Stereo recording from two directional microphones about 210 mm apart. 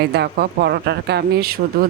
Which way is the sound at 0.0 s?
50° right (ahead or behind).